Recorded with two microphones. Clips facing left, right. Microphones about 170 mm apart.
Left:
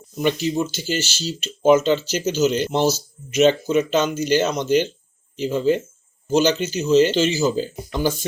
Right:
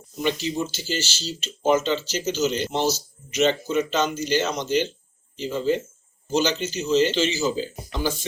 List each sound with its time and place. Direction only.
0.2 s speech: 50° left (ahead or behind)